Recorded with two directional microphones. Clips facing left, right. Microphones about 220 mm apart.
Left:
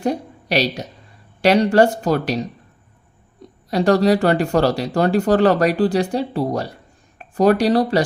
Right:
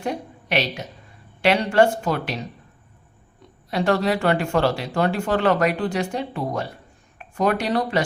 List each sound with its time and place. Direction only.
0.0 s a woman's voice: 35° left (ahead or behind)
3.7 s speech: 40° left (ahead or behind)